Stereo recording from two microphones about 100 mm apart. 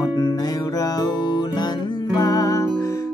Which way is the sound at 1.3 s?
45° left (ahead or behind).